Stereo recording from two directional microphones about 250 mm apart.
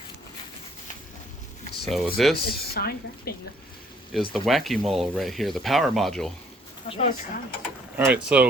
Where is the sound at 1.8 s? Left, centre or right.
Centre.